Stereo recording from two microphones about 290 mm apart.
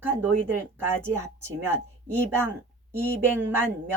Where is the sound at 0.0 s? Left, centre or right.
Centre.